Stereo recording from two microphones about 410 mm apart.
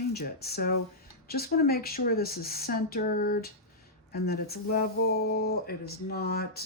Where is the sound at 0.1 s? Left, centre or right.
Left.